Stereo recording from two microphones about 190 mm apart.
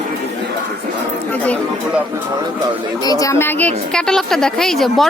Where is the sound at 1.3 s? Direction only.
10° left (ahead or behind).